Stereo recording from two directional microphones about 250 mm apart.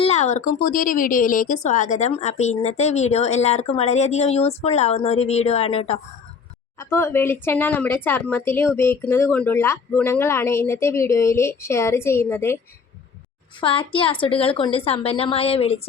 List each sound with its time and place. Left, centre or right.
0.0 s speech: left
6.7 s a woman's voice: centre
13.6 s speech: left